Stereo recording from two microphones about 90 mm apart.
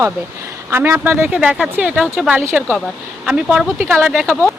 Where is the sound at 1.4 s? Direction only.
10° right (ahead or behind).